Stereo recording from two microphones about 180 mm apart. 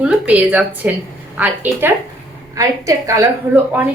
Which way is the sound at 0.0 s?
10° right (ahead or behind).